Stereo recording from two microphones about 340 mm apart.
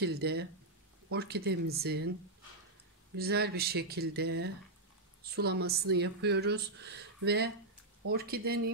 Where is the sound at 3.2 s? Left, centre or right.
Right.